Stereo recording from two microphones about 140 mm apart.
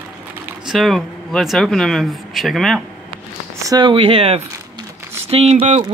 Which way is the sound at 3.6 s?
30° right (ahead or behind).